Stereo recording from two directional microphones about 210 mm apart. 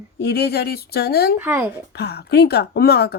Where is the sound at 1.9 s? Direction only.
50° left (ahead or behind).